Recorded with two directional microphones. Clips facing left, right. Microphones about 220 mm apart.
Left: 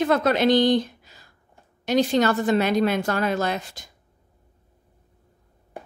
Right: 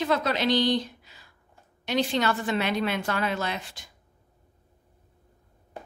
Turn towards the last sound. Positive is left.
turn(degrees=40)  # may be behind; listen again after turning